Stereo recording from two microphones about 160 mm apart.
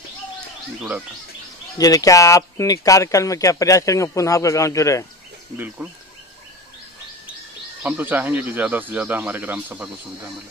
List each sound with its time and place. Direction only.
0.7 s speech: 10° right (ahead or behind)
1.8 s speech: 20° left (ahead or behind)
7.8 s speech: 10° right (ahead or behind)